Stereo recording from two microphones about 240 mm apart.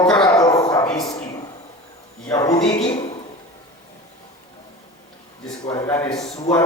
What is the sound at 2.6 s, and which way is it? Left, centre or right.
Speech, left.